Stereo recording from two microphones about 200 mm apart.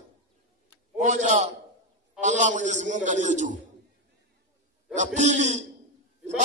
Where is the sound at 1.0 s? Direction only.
35° right (ahead or behind).